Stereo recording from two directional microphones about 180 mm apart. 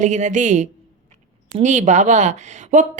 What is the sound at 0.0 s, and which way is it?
A woman's voice, 40° right (ahead or behind).